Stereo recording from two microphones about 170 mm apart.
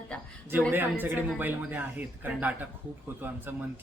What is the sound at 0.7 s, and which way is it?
Speech, 10° right (ahead or behind).